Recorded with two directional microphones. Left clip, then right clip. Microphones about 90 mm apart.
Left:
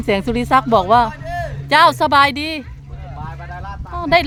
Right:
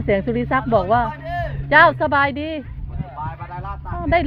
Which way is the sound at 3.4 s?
10° left (ahead or behind).